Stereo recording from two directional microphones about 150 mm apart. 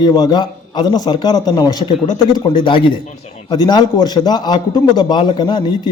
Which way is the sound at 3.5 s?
25° left (ahead or behind).